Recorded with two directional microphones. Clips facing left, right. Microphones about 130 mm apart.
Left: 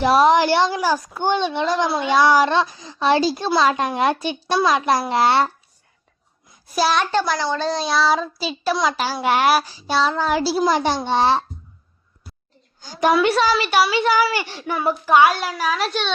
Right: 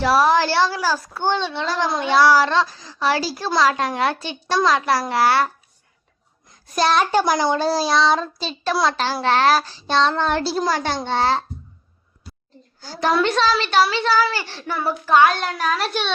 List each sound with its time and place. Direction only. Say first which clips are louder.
0.0 s a child's voice: left 2 dB; 20° left (ahead or behind)
6.5 s a child's voice: right 1 dB; 5° left (ahead or behind)
7.1 s a child's voice: right 3 dB; 15° right (ahead or behind); by 11.4 s 20° left (ahead or behind)
12.8 s a child's voice: left 2 dB; 15° left (ahead or behind); by 16.1 s centre (ahead or behind)